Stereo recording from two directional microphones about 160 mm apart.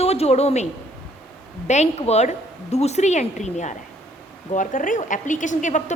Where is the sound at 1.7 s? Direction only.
45° left (ahead or behind).